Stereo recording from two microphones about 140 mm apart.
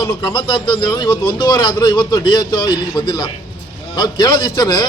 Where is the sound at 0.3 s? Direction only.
35° left (ahead or behind).